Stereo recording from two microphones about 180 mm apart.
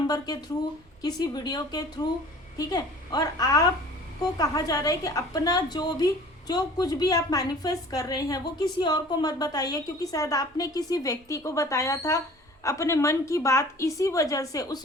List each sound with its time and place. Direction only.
0.1 s a woman's voice: 20° left (ahead or behind)